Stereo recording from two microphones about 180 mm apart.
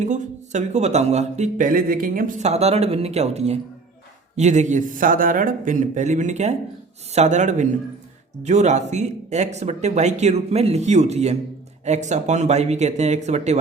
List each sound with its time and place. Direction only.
0.0 s a man's voice: 40° right (ahead or behind)